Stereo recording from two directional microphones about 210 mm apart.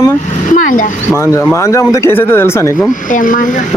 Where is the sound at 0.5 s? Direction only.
40° left (ahead or behind).